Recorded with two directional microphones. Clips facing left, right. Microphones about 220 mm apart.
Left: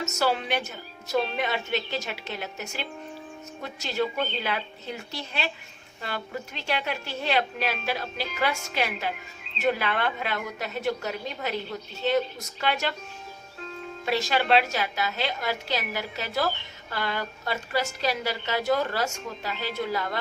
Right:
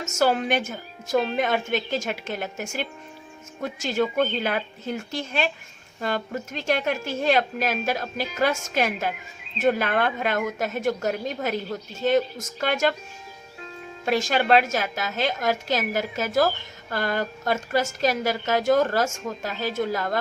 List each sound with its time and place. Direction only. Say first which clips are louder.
0.1 s a woman's voice: right 7 dB; 45° right (ahead or behind)
14.0 s a woman's voice: right 3 dB; 45° right (ahead or behind)